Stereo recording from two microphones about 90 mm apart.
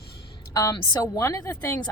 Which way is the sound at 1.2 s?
35° left (ahead or behind).